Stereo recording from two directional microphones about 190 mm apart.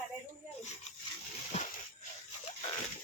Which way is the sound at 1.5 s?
35° left (ahead or behind).